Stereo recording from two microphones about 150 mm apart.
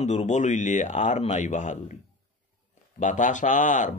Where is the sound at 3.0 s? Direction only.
55° left (ahead or behind).